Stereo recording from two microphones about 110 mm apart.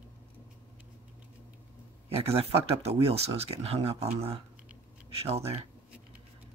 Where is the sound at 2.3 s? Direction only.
65° right (ahead or behind).